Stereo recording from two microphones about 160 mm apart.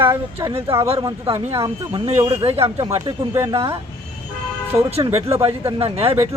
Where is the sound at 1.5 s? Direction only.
30° right (ahead or behind).